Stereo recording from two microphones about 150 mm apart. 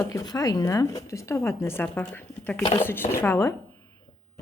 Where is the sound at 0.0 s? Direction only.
25° left (ahead or behind).